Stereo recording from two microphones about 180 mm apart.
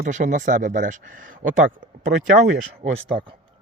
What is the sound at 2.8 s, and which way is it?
Speech, 40° right (ahead or behind).